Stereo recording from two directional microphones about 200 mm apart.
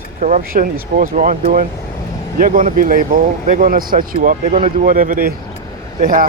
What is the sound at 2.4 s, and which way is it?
Speech, 45° right (ahead or behind).